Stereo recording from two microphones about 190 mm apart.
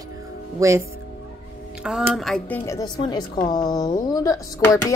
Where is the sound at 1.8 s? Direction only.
5° right (ahead or behind).